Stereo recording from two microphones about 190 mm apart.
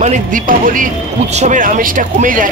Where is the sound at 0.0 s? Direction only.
40° right (ahead or behind).